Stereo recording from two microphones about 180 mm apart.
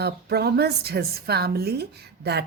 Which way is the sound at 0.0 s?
65° right (ahead or behind).